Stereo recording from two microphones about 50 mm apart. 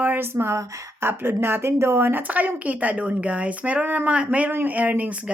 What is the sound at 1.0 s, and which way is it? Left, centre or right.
Speech, right.